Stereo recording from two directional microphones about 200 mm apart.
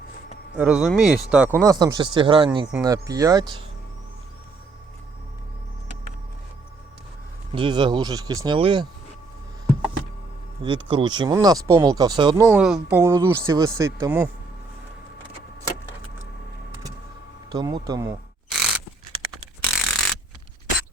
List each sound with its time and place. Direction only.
0.5 s speech: 5° right (ahead or behind)
7.5 s speech: 25° right (ahead or behind)
10.6 s speech: 25° right (ahead or behind)
12.5 s speech: 5° right (ahead or behind)
17.5 s speech: 20° right (ahead or behind)
18.5 s a sound: centre (ahead or behind)
19.6 s mechanisms: centre (ahead or behind)